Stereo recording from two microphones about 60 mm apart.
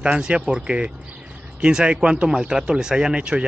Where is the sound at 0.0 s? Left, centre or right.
Centre.